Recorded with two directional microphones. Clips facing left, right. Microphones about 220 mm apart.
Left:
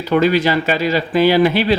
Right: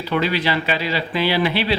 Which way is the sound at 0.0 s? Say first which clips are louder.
Left 7 dB; 45° left (ahead or behind).